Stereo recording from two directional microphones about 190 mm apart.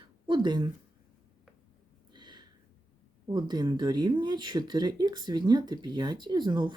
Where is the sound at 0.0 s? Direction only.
25° right (ahead or behind).